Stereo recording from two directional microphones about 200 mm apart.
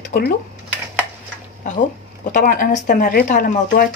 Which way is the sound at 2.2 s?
40° left (ahead or behind).